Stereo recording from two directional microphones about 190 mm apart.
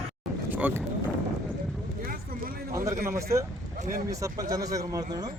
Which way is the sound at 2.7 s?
15° right (ahead or behind).